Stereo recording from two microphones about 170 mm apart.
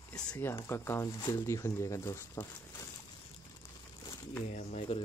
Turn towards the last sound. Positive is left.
turn(degrees=40)  # may be behind; listen again after turning